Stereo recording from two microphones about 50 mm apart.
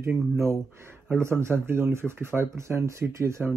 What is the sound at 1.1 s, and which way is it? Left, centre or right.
Speech, right.